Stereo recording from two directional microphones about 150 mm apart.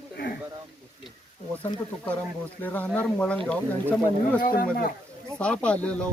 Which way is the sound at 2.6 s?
10° left (ahead or behind).